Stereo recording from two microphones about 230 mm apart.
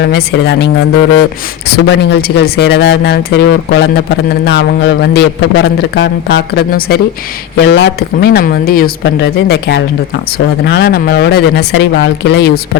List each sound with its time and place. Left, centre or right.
0.0 s speech: left
1.7 s speech: left